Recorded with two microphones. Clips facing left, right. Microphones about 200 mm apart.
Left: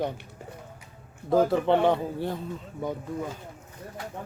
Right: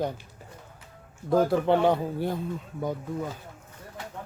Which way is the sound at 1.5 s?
5° right (ahead or behind).